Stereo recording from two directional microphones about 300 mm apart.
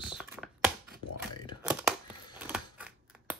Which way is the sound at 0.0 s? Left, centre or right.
Centre.